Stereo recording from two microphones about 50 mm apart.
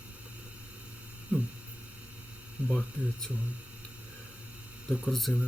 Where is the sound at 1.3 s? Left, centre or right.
Right.